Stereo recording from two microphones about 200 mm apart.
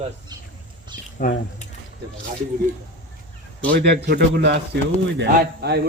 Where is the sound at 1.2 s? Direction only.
45° left (ahead or behind).